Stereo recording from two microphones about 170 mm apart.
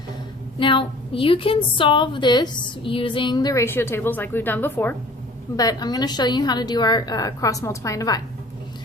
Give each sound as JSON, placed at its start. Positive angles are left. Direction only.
{"t": 0.6, "sound": "a woman's voice", "side_deg": 30}
{"t": 5.5, "sound": "a woman's voice", "side_deg": 20}